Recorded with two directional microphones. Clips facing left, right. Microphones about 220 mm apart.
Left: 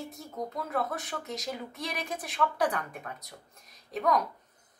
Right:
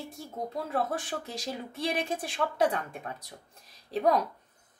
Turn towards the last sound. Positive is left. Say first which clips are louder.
# right 2 dB
turn(degrees=-30)  # may be behind; listen again after turning